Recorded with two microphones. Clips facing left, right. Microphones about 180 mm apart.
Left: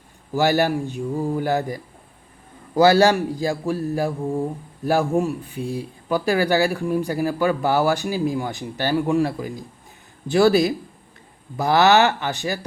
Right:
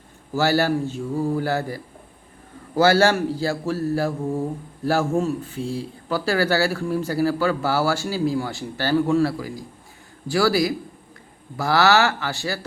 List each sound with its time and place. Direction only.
0.3 s speech: 15° left (ahead or behind)